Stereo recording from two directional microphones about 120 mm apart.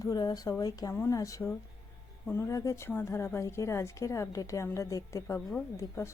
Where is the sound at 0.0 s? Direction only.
30° left (ahead or behind).